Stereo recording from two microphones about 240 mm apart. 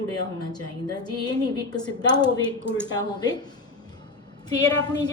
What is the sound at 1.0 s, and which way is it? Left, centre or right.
Speech, centre.